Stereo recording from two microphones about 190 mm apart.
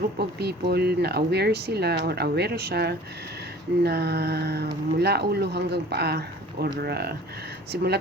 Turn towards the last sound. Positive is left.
turn(degrees=-60)  # may be behind; listen again after turning